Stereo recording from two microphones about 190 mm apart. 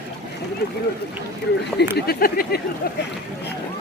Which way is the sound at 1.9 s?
55° left (ahead or behind).